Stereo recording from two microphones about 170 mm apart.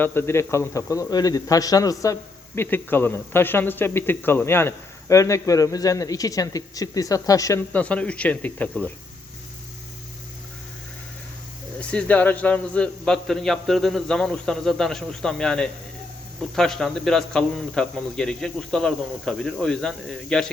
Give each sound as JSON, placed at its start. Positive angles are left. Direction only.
{"t": 0.0, "sound": "a man's voice", "side_deg": 15}
{"t": 7.7, "sound": "speech", "side_deg": 10}
{"t": 11.8, "sound": "speech", "side_deg": 5}